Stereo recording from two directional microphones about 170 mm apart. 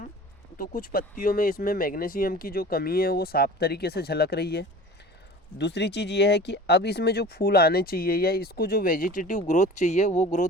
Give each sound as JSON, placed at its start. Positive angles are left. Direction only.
{"t": 0.6, "sound": "speech", "side_deg": 55}
{"t": 5.5, "sound": "speech", "side_deg": 90}